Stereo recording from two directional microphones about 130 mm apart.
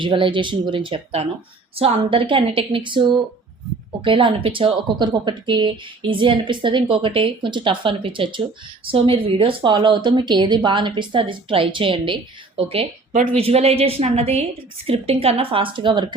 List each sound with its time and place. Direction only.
0.0 s speech: 40° right (ahead or behind)
4.0 s a woman's voice: 40° right (ahead or behind)